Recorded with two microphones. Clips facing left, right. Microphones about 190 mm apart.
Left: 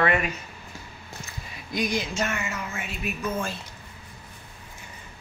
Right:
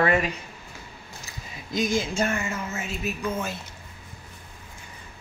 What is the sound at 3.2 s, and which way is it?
Speech, 15° right (ahead or behind).